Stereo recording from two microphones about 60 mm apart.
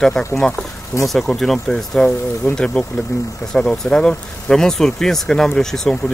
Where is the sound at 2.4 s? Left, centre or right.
Left.